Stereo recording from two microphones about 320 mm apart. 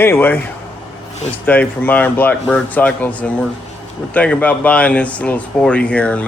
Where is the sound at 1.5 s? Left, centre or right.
Centre.